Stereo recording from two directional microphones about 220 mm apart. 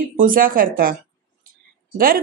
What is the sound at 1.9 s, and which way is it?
Speech, 40° right (ahead or behind).